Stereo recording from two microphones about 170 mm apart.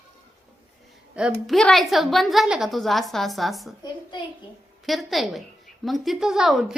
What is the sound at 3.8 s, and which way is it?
Speech, 25° left (ahead or behind).